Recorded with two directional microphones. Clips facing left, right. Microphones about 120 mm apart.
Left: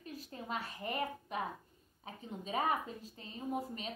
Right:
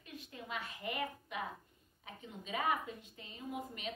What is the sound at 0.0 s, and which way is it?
A woman's voice, 35° left (ahead or behind).